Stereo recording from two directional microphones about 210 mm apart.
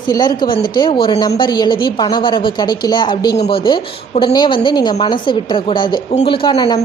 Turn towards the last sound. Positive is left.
turn(degrees=20)  # may be behind; listen again after turning